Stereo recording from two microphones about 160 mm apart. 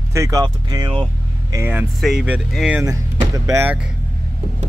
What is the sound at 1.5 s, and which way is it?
Speech, 10° right (ahead or behind).